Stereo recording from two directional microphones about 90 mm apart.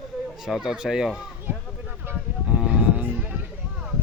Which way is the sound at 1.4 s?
20° right (ahead or behind).